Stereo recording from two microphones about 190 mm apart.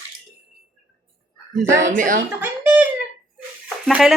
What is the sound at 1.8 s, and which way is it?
Speech, 45° right (ahead or behind).